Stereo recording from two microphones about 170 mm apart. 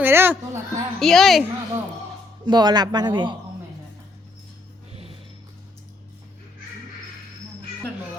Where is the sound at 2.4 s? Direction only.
25° right (ahead or behind).